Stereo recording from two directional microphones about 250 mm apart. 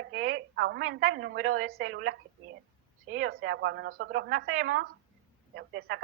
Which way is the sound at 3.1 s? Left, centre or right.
Right.